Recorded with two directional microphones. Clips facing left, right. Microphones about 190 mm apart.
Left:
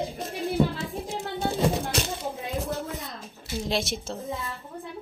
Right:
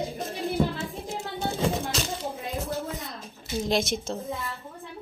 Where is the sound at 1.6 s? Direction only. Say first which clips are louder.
Even; centre (ahead or behind).